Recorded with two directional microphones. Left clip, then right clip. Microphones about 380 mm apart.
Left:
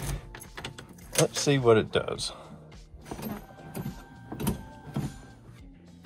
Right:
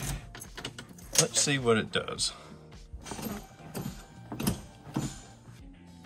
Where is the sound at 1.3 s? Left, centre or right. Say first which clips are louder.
Left 7 dB; centre.